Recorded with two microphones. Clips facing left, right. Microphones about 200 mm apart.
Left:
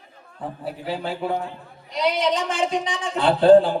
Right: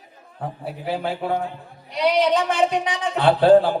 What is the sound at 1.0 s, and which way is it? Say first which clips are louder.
A man's voice: right 1 dB; 55° right (ahead or behind).